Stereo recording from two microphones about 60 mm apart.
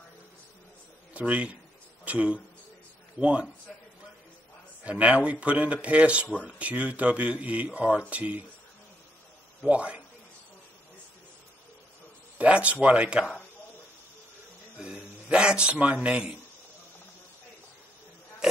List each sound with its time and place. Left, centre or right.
1.1 s speech: right
4.8 s speech: right
9.7 s speech: right
12.4 s speech: right
14.8 s a man's voice: centre